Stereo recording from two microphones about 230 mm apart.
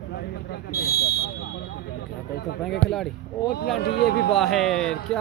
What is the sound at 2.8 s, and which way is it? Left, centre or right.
Speech, centre.